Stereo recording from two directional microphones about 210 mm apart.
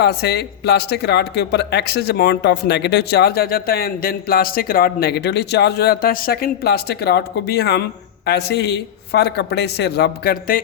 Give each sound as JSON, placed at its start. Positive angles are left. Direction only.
{"t": 0.0, "sound": "speech", "side_deg": 50}